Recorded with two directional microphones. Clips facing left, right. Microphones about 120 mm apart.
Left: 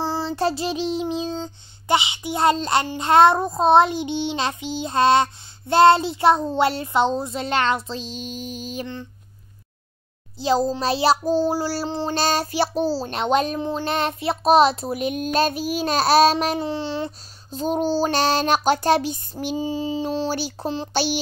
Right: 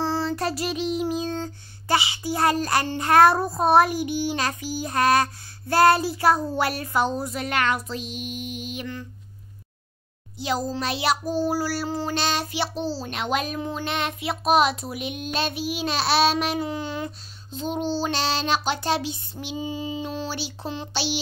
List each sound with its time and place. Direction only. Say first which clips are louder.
0.3 s child singing: left 3 dB; 30° left (ahead or behind)
10.4 s child singing: left 6 dB; 30° left (ahead or behind)
12.2 s a child's voice: left 8 dB; 40° left (ahead or behind)
17.5 s a child's voice: left 5 dB; 40° left (ahead or behind)
20.9 s speech: left 5 dB; 45° left (ahead or behind)